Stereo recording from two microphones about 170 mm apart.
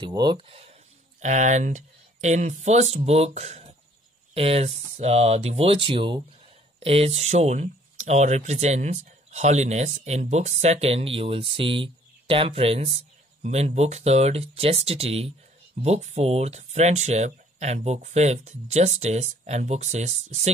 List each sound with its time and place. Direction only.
0.0 s speech: 25° right (ahead or behind); by 20.5 s 40° right (ahead or behind)